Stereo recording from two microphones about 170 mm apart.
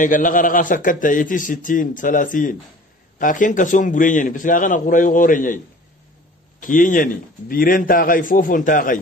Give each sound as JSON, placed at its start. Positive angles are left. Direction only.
{"t": 0.0, "sound": "a man's voice", "side_deg": 50}
{"t": 6.6, "sound": "a man's voice", "side_deg": 50}